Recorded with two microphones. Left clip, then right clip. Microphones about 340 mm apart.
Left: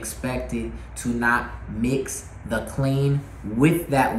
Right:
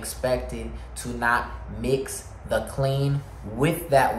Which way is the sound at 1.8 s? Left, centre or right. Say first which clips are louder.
Even; right.